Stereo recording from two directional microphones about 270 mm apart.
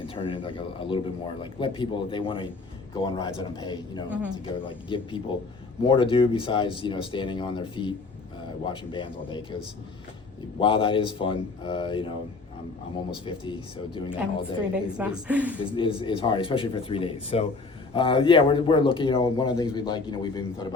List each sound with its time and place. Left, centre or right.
0.0 s a man's voice: centre
4.1 s a woman's voice: centre
4.4 s speech: centre
10.6 s speech: centre
14.9 s a woman's voice: centre
15.7 s a man's voice: centre